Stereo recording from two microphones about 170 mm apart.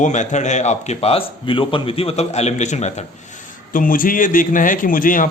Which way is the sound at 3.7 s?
55° left (ahead or behind).